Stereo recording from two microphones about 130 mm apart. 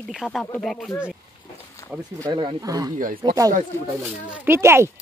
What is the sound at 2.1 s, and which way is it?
Speech, 35° right (ahead or behind).